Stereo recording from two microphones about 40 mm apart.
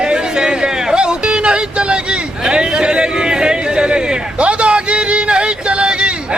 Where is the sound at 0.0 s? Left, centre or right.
Right.